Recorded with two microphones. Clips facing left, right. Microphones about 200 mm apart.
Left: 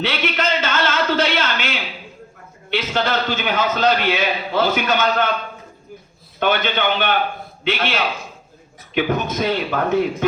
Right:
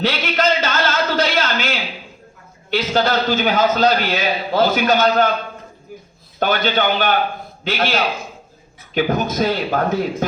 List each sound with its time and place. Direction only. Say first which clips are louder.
0.0 s a sound: right 3 dB; 40° right (ahead or behind)
2.6 s a man's voice: right 3 dB; 40° right (ahead or behind)
6.4 s a man's voice: right 1 dB; 40° right (ahead or behind)